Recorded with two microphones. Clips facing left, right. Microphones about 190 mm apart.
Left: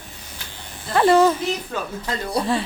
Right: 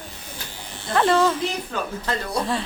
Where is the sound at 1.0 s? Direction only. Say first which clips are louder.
Left 4 dB; 10° left (ahead or behind).